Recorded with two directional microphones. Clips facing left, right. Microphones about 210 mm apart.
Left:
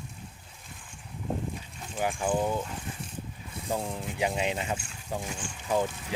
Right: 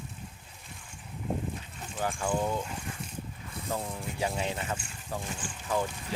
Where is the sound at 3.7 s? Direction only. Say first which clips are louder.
Left 3 dB; 15° left (ahead or behind).